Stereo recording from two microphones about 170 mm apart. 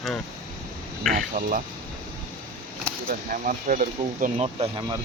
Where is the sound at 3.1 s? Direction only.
55° right (ahead or behind).